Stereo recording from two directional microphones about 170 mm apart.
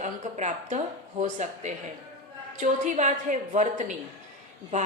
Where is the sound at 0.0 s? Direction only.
45° right (ahead or behind).